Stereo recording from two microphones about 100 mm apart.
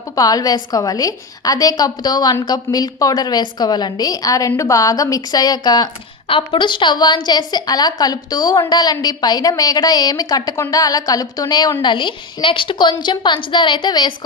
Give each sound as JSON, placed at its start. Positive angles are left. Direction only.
{"t": 0.1, "sound": "a woman's voice", "side_deg": 35}
{"t": 6.2, "sound": "a woman's voice", "side_deg": 60}
{"t": 11.8, "sound": "a woman's voice", "side_deg": 55}